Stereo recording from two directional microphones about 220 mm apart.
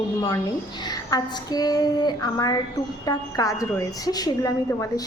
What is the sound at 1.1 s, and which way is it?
A woman's voice, 15° left (ahead or behind).